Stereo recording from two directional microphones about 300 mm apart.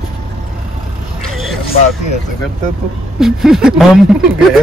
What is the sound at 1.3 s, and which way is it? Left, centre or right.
Vehicle, centre.